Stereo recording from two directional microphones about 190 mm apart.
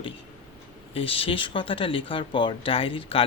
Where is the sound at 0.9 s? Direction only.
30° left (ahead or behind).